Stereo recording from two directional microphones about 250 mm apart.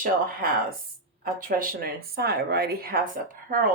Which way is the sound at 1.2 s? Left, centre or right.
Right.